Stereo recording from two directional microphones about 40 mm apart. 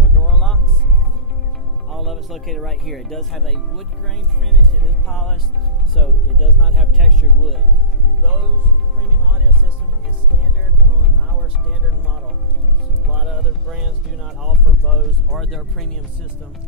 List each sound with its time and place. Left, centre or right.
0.2 s music: centre
1.9 s speech: centre
5.0 s speech: centre
13.1 s speech: centre
14.4 s speech: centre
15.3 s speech: centre